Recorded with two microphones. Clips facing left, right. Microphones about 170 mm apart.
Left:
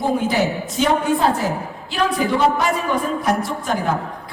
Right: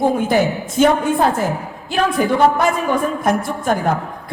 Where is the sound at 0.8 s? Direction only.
50° right (ahead or behind).